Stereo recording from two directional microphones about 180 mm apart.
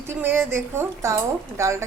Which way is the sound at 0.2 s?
15° right (ahead or behind).